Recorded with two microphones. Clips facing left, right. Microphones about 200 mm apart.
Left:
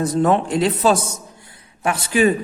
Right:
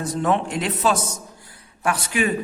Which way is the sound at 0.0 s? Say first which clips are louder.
Left 5 dB; 40° left (ahead or behind).